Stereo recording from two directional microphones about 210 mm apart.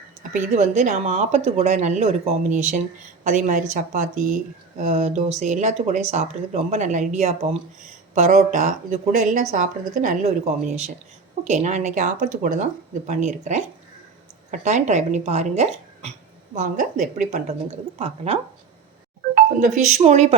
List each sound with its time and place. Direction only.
0.2 s speech: 35° right (ahead or behind)
19.3 s music: 40° right (ahead or behind)
20.0 s speech: 30° right (ahead or behind)